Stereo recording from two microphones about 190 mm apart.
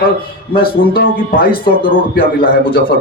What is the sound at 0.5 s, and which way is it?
A man's voice, 50° left (ahead or behind).